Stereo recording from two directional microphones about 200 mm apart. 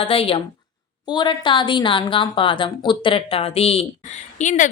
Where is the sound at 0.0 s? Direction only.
30° left (ahead or behind).